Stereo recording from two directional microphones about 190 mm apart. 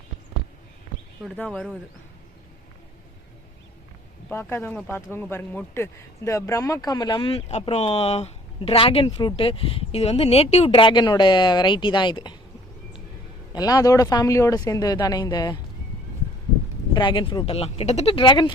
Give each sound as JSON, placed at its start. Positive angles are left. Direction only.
{"t": 1.4, "sound": "speech", "side_deg": 5}
{"t": 4.3, "sound": "speech", "side_deg": 10}
{"t": 13.5, "sound": "speech", "side_deg": 20}
{"t": 16.9, "sound": "speech", "side_deg": 25}